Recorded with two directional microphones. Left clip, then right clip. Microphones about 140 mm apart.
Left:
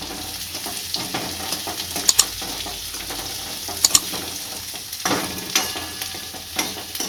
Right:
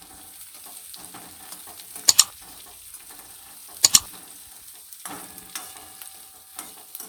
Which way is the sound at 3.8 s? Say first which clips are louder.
Even; centre (ahead or behind).